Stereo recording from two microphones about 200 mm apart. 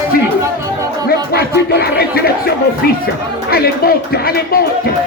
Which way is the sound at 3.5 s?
50° left (ahead or behind).